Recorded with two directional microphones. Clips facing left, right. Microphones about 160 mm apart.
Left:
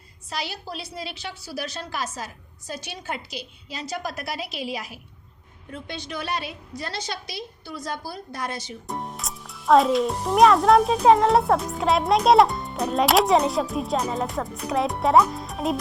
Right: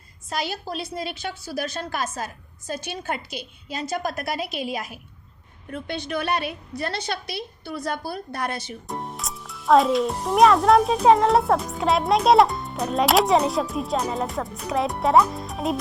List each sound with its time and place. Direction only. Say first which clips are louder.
0.3 s a woman's voice: right 4 dB; 50° right (ahead or behind)
8.9 s a child's voice: even; centre (ahead or behind)